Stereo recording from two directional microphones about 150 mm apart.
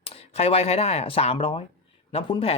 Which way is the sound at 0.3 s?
45° left (ahead or behind).